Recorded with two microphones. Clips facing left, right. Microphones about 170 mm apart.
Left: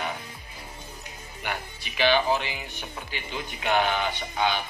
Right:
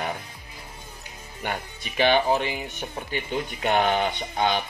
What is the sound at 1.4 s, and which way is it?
Speech, 45° right (ahead or behind).